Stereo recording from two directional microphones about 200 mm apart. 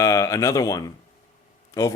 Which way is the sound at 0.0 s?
15° left (ahead or behind).